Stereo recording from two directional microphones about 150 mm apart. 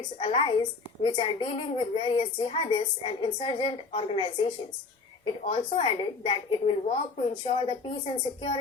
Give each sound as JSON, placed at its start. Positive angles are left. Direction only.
{"t": 0.2, "sound": "a woman's voice", "side_deg": 35}